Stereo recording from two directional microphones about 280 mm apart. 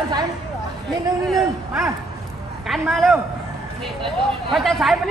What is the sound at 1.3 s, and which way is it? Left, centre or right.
Speech, centre.